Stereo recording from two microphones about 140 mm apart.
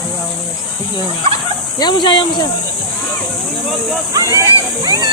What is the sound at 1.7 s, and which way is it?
Speech, 30° left (ahead or behind).